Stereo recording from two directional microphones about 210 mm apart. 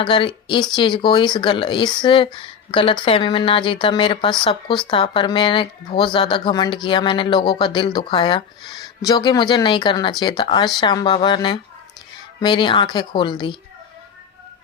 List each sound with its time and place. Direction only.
0.0 s speech: 25° left (ahead or behind)